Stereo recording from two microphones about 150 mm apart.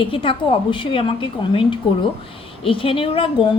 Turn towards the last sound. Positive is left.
turn(degrees=35)  # may be behind; listen again after turning